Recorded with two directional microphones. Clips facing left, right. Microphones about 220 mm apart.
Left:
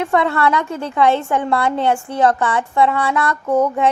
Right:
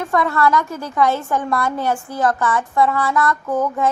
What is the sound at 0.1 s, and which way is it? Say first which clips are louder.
A woman's voice: right 2 dB; 30° left (ahead or behind).